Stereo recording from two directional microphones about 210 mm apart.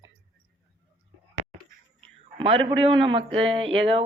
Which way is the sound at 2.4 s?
25° right (ahead or behind).